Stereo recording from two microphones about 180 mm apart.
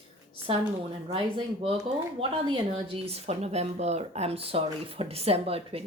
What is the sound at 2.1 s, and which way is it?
Speech, 30° right (ahead or behind).